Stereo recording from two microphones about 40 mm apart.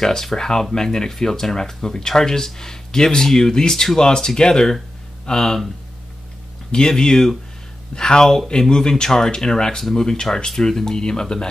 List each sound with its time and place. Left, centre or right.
0.0 s speech: centre
6.7 s speech: centre